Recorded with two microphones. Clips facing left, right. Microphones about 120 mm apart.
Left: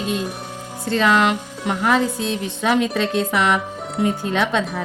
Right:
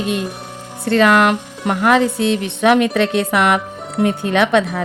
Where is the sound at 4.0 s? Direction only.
65° right (ahead or behind).